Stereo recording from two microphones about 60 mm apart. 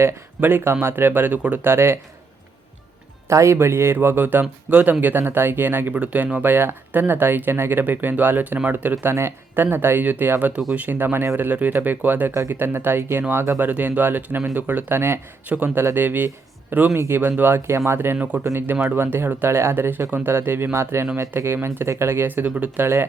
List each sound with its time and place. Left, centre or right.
0.3 s speech: right
3.2 s speech: right
3.9 s speech: right
5.9 s speech: right
9.1 s speech: right
12.3 s speech: right
12.5 s speech: right
13.7 s speech: right
15.4 s speech: right
16.9 s speech: right
18.2 s speech: right
18.5 s speech: right
22.4 s speech: right
22.8 s speech: right